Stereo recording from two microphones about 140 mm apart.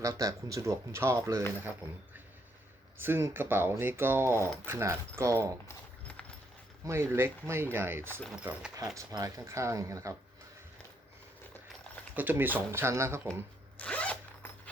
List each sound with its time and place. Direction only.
0.0 s speech: 25° right (ahead or behind)
3.0 s speech: 15° right (ahead or behind)
5.6 s a sound: 10° left (ahead or behind)
6.8 s speech: 20° right (ahead or behind)
9.0 s speech: 20° right (ahead or behind)
12.1 s speech: 15° right (ahead or behind)
13.7 s zipper: 10° left (ahead or behind)